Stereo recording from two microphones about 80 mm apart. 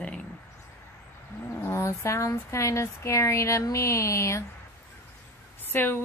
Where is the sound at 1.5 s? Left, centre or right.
Left.